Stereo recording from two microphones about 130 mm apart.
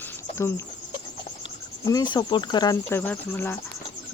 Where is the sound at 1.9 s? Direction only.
30° left (ahead or behind).